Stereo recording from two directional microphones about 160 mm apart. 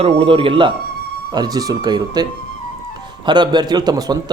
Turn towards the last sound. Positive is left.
turn(degrees=-25)  # may be behind; listen again after turning